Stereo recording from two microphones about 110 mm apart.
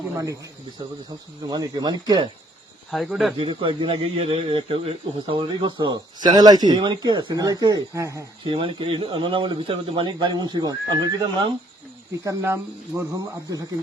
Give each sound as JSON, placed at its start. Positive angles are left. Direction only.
{"t": 1.5, "sound": "speech", "side_deg": -40}
{"t": 2.9, "sound": "speech", "side_deg": 0}
{"t": 3.3, "sound": "speech", "side_deg": -55}
{"t": 8.4, "sound": "speech", "side_deg": -50}
{"t": 12.2, "sound": "speech", "side_deg": -25}